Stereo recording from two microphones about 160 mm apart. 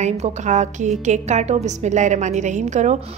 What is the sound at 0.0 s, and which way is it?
A woman's voice, 45° right (ahead or behind).